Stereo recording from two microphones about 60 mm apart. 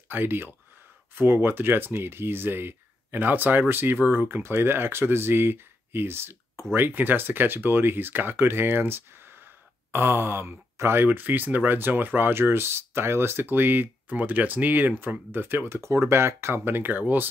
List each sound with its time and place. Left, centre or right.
0.1 s speech: right
11.1 s speech: right
15.8 s speech: right